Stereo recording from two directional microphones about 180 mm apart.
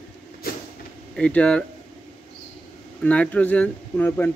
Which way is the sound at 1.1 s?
5° left (ahead or behind).